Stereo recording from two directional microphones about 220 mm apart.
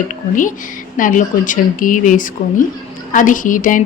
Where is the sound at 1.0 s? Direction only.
35° left (ahead or behind).